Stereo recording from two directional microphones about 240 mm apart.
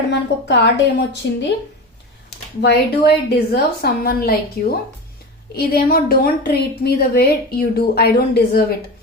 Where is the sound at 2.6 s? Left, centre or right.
Left.